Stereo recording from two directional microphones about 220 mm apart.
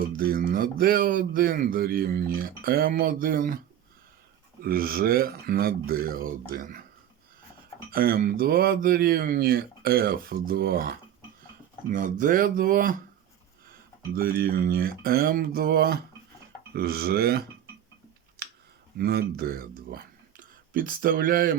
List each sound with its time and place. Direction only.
0.2 s speech: 40° right (ahead or behind)
4.6 s speech: 40° right (ahead or behind)
7.9 s speech: 40° right (ahead or behind)
14.1 s mantra: 40° right (ahead or behind)
18.9 s speech: 45° right (ahead or behind)